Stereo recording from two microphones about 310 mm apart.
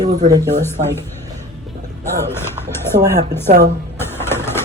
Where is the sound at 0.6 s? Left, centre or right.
Centre.